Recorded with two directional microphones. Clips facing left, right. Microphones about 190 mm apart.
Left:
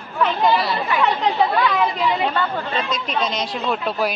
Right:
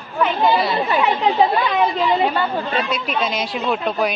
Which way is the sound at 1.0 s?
20° right (ahead or behind).